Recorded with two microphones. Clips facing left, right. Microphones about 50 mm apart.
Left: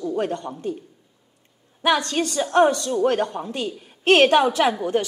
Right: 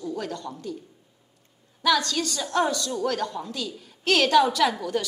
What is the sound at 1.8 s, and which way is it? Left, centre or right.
A woman's voice, left.